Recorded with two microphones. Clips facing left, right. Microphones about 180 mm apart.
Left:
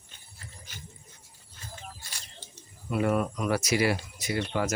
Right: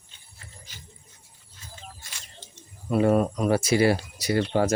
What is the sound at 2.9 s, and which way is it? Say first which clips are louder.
Speech: right 6 dB; 30° right (ahead or behind).